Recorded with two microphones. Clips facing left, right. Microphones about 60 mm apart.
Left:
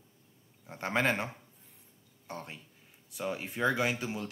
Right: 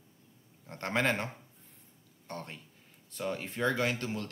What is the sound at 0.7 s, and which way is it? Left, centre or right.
Speech, centre.